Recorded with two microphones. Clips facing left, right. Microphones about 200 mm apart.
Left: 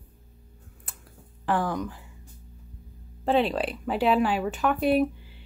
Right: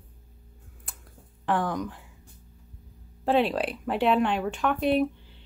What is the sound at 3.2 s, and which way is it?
Speech, centre (ahead or behind).